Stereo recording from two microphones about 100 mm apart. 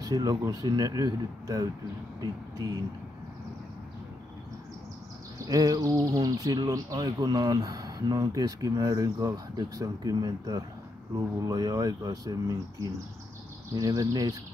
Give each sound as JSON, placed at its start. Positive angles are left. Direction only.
{"t": 0.0, "sound": "speech", "side_deg": -40}
{"t": 5.4, "sound": "speech", "side_deg": -35}